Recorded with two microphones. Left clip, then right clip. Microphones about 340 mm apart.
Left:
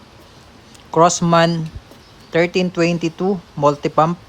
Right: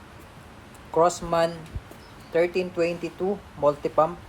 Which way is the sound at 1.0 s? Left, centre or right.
Left.